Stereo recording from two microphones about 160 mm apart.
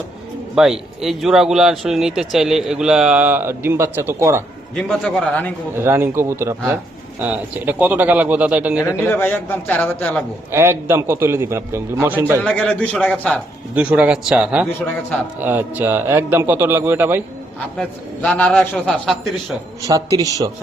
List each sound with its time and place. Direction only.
0.5 s speech: 5° right (ahead or behind)
4.7 s speech: 5° left (ahead or behind)
5.7 s a man's voice: 15° right (ahead or behind)
9.0 s a man's voice: 10° left (ahead or behind)
10.5 s a man's voice: 15° right (ahead or behind)
12.4 s speech: 5° left (ahead or behind)
13.7 s a man's voice: 10° right (ahead or behind)
17.7 s speech: 5° left (ahead or behind)
19.8 s speech: 20° right (ahead or behind)